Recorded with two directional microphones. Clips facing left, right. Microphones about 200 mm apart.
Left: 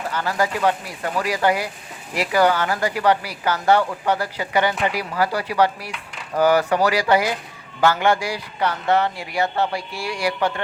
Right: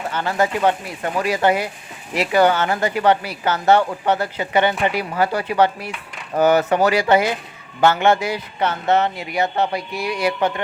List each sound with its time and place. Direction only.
0.1 s speech: 25° right (ahead or behind)